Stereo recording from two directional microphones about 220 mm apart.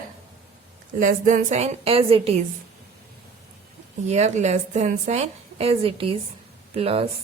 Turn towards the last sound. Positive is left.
turn(degrees=-25)  # may be behind; listen again after turning